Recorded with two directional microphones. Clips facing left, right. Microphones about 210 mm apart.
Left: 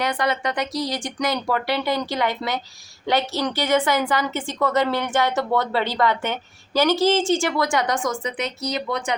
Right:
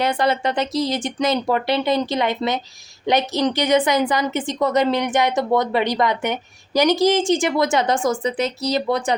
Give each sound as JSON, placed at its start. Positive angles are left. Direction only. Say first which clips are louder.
{"t": 0.0, "sound": "a woman's voice", "louder": "right 4 dB", "side_deg": -25}